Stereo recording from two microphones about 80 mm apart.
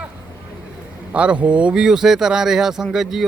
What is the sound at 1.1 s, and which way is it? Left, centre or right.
Speech, centre.